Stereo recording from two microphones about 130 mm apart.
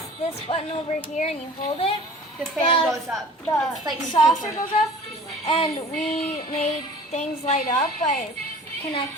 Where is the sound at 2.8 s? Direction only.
Centre (ahead or behind).